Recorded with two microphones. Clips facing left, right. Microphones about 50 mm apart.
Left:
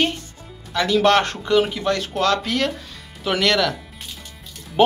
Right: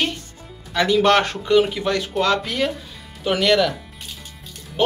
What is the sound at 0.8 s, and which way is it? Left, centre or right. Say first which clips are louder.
Speech: even; centre.